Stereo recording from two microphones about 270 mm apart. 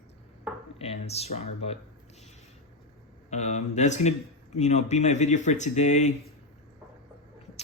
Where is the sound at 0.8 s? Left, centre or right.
Left.